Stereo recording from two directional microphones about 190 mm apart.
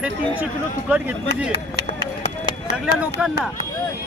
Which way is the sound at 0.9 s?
5° right (ahead or behind).